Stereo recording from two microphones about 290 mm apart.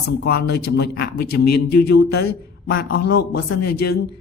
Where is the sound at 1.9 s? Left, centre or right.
Left.